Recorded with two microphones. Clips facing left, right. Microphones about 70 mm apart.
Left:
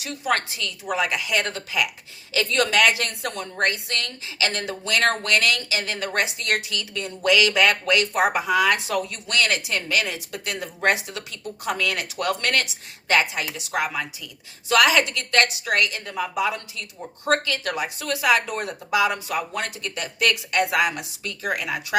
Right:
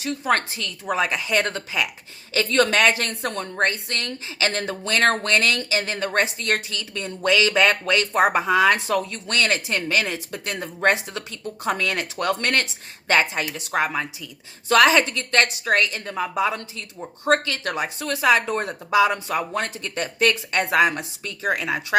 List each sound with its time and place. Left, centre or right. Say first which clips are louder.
0.0 s speech: right 2 dB; right